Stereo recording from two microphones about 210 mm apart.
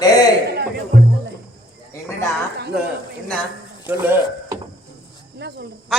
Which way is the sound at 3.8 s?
10° right (ahead or behind).